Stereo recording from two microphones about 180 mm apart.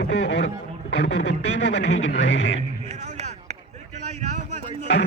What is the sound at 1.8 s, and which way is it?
Speech, 75° left (ahead or behind).